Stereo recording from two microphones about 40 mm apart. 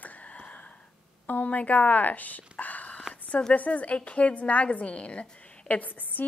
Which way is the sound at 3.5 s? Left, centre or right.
Left.